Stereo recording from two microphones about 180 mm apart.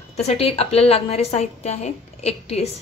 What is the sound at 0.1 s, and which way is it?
A woman's voice, 35° left (ahead or behind).